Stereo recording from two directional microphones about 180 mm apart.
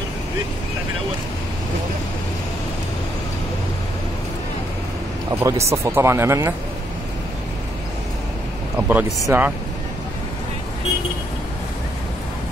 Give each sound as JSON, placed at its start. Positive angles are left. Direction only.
{"t": 5.3, "sound": "speech", "side_deg": -15}
{"t": 8.7, "sound": "a sound", "side_deg": -10}
{"t": 9.3, "sound": "speech", "side_deg": -15}